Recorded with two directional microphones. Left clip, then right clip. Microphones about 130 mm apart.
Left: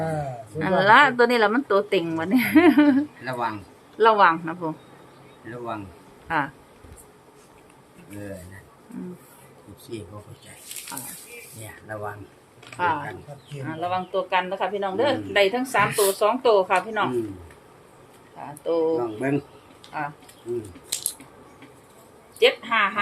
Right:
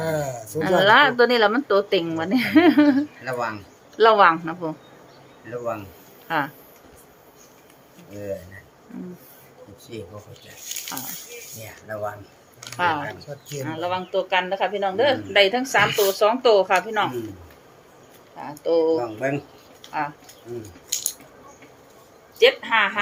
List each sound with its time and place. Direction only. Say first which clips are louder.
0.6 s speech: even; 10° right (ahead or behind)
3.9 s speech: right 2 dB; 25° right (ahead or behind)
5.5 s speech: right 4 dB; centre (ahead or behind)
6.2 s speech: right 1 dB; 10° right (ahead or behind)
12.7 s speech: right 2 dB; 35° right (ahead or behind)
18.3 s speech: right 3 dB; 40° right (ahead or behind)
18.9 s speech: right 1 dB; 10° left (ahead or behind)
19.9 s speech: right 4 dB; 35° right (ahead or behind)
22.4 s speech: right 2 dB; 25° right (ahead or behind)